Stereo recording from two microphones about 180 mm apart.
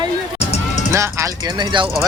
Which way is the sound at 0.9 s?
15° right (ahead or behind).